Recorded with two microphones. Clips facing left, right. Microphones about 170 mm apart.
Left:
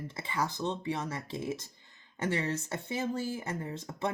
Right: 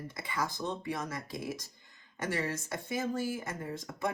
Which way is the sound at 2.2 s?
25° left (ahead or behind).